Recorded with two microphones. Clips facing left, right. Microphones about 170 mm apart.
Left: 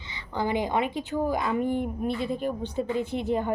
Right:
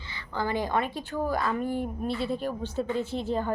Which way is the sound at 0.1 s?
20° left (ahead or behind).